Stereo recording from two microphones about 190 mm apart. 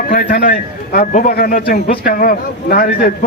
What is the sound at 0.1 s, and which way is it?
A man's voice, 50° left (ahead or behind).